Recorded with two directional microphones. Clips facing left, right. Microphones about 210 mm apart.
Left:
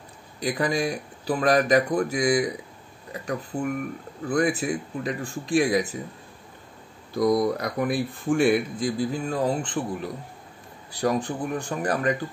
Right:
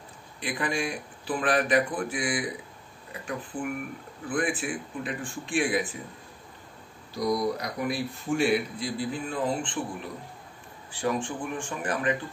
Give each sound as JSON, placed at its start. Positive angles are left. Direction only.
{"t": 0.4, "sound": "speech", "side_deg": 40}
{"t": 7.2, "sound": "speech", "side_deg": 50}
{"t": 10.9, "sound": "speech", "side_deg": 40}